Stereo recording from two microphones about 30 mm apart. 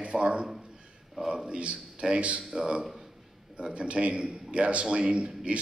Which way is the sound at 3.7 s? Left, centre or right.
Right.